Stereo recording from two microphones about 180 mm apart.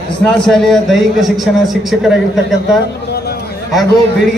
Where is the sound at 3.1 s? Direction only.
60° left (ahead or behind).